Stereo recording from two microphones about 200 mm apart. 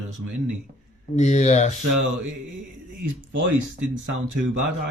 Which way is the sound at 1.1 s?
35° left (ahead or behind).